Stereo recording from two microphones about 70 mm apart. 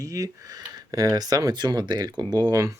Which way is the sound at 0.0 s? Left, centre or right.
Right.